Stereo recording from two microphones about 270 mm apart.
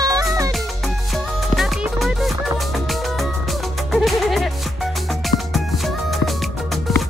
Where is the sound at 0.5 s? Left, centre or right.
Centre.